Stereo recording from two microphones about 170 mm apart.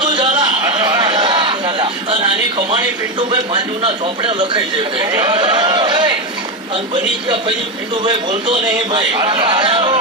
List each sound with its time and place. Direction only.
0.2 s a sound: 30° right (ahead or behind)
3.2 s a man's voice: 30° right (ahead or behind)
8.9 s a man's voice: 30° right (ahead or behind)